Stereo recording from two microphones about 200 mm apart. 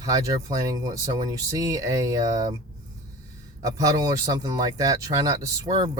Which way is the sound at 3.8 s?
20° right (ahead or behind).